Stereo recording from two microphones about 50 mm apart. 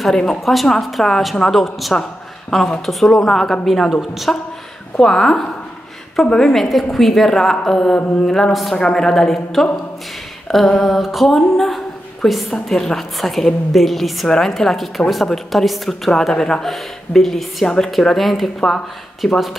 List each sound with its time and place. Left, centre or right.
0.1 s a woman's voice: centre
3.9 s a woman's voice: centre
5.0 s a woman's voice: centre
17.6 s a woman's voice: centre
17.9 s a woman's voice: centre